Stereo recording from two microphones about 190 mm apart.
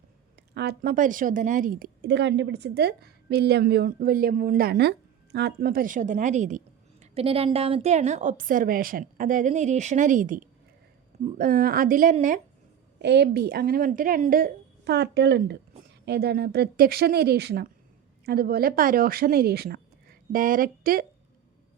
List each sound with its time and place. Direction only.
0.5 s a woman's voice: 60° right (ahead or behind); by 12.4 s 40° right (ahead or behind)
13.0 s a woman's voice: 65° right (ahead or behind); by 21.1 s 45° right (ahead or behind)